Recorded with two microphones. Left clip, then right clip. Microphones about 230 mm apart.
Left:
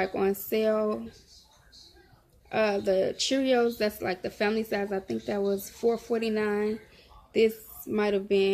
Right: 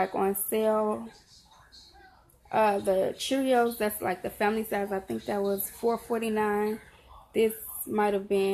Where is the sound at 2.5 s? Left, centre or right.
Centre.